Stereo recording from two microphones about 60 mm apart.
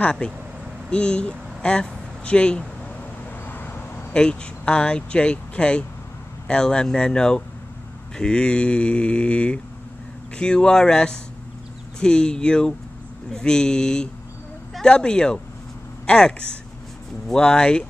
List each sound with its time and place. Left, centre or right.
0.0 s speech: centre
3.4 s vehicle: left
4.1 s speech: centre
8.2 s mantra: centre
10.3 s speech: centre